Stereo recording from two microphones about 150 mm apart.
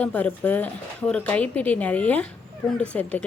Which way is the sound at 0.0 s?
10° left (ahead or behind).